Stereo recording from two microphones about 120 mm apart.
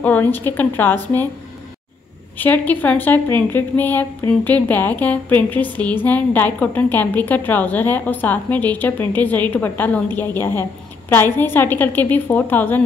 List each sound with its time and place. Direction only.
0.0 s a woman's voice: 15° left (ahead or behind)
2.3 s a woman's voice: 15° left (ahead or behind)